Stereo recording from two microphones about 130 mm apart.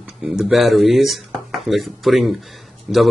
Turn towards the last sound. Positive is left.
turn(degrees=-5)  # may be behind; listen again after turning